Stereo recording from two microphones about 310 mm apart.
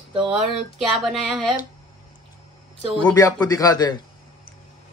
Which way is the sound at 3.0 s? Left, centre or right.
Centre.